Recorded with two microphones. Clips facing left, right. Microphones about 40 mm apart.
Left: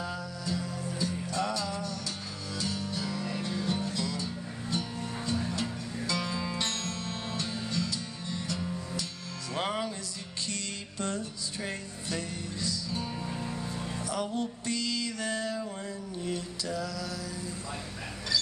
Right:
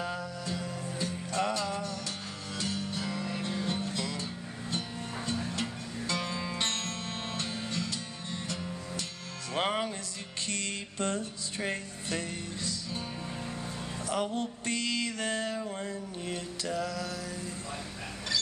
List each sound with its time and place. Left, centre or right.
0.0 s music: right
14.0 s music: right
15.8 s mantra: right